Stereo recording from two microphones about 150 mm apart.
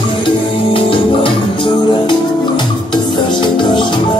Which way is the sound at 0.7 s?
35° left (ahead or behind).